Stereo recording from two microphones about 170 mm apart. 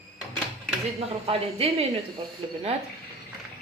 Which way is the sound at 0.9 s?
35° right (ahead or behind).